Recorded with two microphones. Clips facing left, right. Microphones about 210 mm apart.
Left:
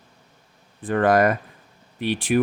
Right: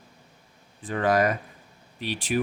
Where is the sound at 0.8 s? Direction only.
55° left (ahead or behind).